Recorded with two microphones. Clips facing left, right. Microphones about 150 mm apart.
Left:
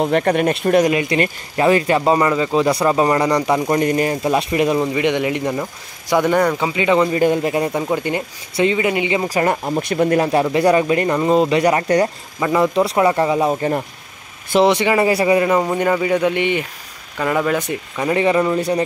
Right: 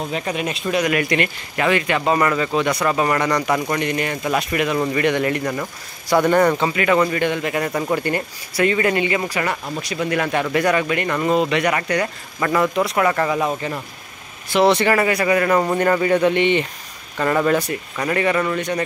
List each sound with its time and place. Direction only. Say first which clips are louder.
0.0 s speech: left 8 dB; 60° left (ahead or behind)
0.8 s speech: left 3 dB; 25° left (ahead or behind)
2.6 s speech: left 4 dB; 30° left (ahead or behind)
4.7 s speech: left 1 dB; 15° left (ahead or behind)
7.2 s speech: left 5 dB; 35° left (ahead or behind); by 9.3 s 15° left (ahead or behind)
9.3 s speech: left 6 dB; 40° left (ahead or behind)
10.0 s speech: left 4 dB; 35° left (ahead or behind)
12.4 s speech: left 2 dB; 15° left (ahead or behind)
12.7 s speech: left 3 dB; 30° left (ahead or behind)
13.6 s speech: left 7 dB; 40° left (ahead or behind)
14.6 s speech: left 1 dB; 15° left (ahead or behind)
15.0 s speech: left 3 dB; 25° left (ahead or behind)
15.5 s speech: even; 5° left (ahead or behind)
17.9 s speech: left 4 dB; 20° left (ahead or behind)